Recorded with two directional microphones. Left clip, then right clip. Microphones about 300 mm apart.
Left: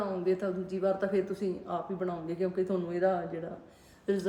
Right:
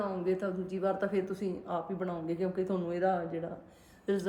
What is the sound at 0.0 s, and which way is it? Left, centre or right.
A woman's voice, centre.